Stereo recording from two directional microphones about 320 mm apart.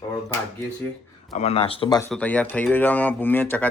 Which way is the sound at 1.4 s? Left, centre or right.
Centre.